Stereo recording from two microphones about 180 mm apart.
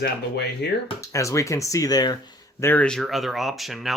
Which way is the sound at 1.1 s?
15° left (ahead or behind).